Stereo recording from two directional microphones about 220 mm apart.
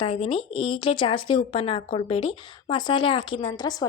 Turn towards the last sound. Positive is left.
turn(degrees=20)  # may be behind; listen again after turning